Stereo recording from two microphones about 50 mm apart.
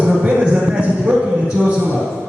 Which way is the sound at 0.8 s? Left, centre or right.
Right.